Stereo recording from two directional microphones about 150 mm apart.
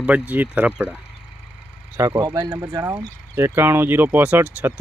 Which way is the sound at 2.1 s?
30° right (ahead or behind).